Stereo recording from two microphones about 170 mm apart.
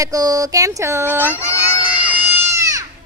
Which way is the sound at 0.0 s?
20° right (ahead or behind).